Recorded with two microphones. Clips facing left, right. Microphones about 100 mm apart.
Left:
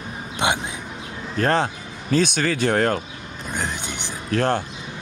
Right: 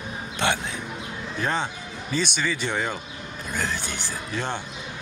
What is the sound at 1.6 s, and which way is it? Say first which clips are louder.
Speech: left 5 dB; 55° left (ahead or behind).